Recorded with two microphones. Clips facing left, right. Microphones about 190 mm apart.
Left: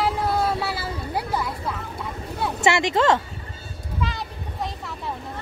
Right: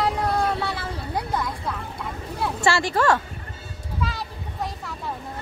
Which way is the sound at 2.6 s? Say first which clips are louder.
Left 2 dB; 20° left (ahead or behind).